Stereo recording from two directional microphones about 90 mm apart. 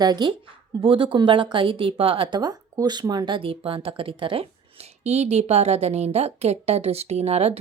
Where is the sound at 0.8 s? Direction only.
70° right (ahead or behind); by 3.3 s 45° right (ahead or behind).